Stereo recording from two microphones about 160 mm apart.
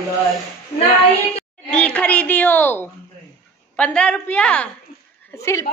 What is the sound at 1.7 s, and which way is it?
A child's voice, 10° left (ahead or behind).